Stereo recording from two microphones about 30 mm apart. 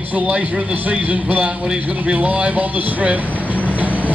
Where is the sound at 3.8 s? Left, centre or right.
Right.